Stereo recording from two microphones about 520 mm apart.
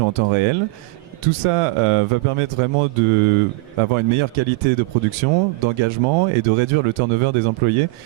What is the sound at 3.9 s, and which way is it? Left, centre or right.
Speech, right.